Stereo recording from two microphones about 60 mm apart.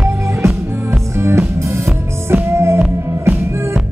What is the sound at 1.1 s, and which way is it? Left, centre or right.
Music, right.